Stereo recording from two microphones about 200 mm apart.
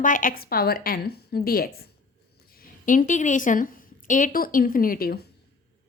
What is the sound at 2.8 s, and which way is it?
A woman's voice, 40° left (ahead or behind).